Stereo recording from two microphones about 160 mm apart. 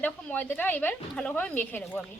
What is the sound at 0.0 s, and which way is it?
A woman's voice, 10° left (ahead or behind).